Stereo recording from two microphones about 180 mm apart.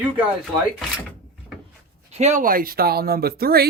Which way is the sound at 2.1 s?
40° right (ahead or behind).